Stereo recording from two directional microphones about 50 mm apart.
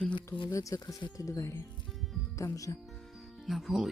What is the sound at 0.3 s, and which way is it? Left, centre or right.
Speech, left.